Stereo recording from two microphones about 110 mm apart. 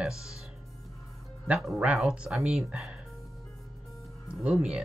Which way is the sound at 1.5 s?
5° right (ahead or behind).